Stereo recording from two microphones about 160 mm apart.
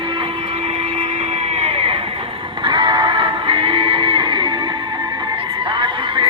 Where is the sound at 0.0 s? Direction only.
35° right (ahead or behind).